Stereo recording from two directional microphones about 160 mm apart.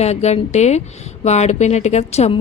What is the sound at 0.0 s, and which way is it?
A woman's voice, 45° left (ahead or behind).